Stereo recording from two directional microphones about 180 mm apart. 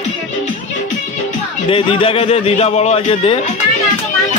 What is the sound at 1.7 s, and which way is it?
A man's voice, 30° left (ahead or behind).